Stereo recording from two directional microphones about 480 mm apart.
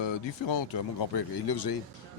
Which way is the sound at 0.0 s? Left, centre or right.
Left.